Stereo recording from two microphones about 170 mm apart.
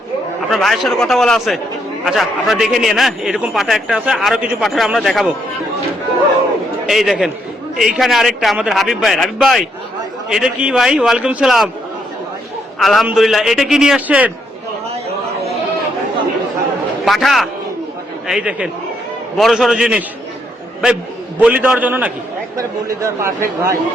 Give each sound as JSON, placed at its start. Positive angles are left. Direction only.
{"t": 0.5, "sound": "a man's voice", "side_deg": 0}
{"t": 6.8, "sound": "a man's voice", "side_deg": 0}
{"t": 12.8, "sound": "a man's voice", "side_deg": 0}
{"t": 17.1, "sound": "a man's voice", "side_deg": 0}